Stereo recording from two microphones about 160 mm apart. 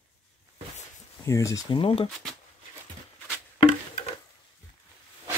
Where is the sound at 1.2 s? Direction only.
20° left (ahead or behind).